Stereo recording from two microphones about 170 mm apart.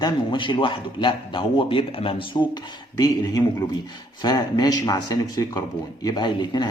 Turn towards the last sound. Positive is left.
turn(degrees=25)  # may be behind; listen again after turning